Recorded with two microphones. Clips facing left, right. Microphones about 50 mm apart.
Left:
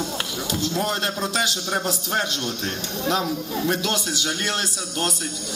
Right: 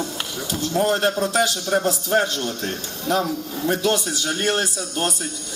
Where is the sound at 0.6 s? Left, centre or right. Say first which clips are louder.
Right 6 dB; right.